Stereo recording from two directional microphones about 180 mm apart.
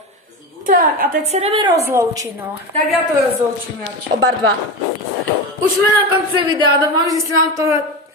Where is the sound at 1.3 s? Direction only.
35° right (ahead or behind).